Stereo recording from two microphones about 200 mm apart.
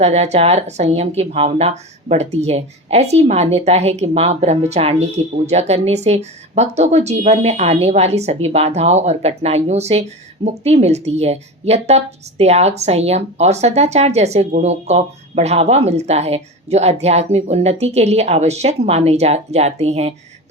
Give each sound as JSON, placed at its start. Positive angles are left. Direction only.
{"t": 0.0, "sound": "speech", "side_deg": -35}